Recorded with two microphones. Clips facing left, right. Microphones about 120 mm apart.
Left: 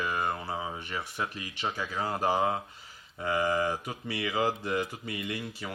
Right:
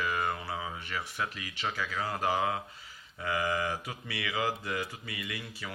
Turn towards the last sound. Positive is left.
turn(degrees=35)  # may be behind; listen again after turning